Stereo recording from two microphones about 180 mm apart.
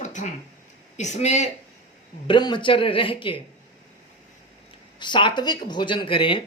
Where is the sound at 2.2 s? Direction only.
25° left (ahead or behind).